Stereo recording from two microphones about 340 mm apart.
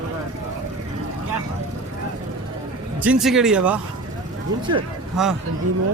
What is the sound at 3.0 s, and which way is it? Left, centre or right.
Speech, centre.